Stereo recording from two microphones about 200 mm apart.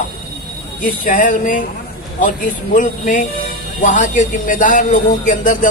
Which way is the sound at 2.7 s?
40° left (ahead or behind).